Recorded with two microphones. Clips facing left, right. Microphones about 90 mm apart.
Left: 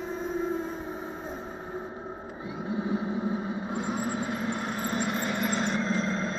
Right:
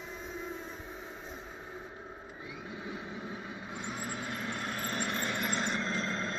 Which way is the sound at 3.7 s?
35° left (ahead or behind).